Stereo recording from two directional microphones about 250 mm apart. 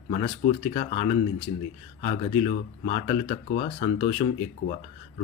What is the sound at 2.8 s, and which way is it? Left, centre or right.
Speech, left.